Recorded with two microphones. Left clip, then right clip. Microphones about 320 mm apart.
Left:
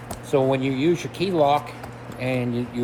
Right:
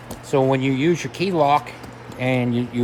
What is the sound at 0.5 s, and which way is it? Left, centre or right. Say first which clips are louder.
Speech: right 2 dB; right.